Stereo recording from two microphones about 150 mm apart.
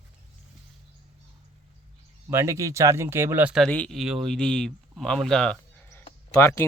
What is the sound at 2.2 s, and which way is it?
Speech, 20° right (ahead or behind).